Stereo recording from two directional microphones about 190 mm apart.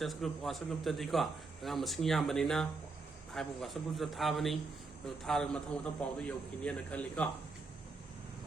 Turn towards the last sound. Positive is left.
turn(degrees=5)  # may be behind; listen again after turning